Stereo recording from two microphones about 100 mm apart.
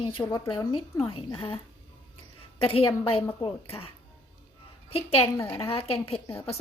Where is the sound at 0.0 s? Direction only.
60° left (ahead or behind).